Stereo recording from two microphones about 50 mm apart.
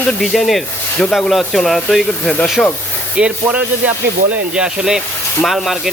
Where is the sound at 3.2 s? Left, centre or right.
Centre.